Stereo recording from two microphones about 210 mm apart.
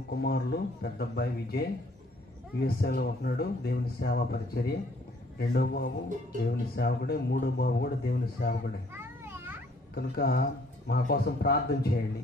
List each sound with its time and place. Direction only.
0.1 s speech: 50° left (ahead or behind)
8.9 s children playing: 10° right (ahead or behind)
9.9 s speech: 50° left (ahead or behind)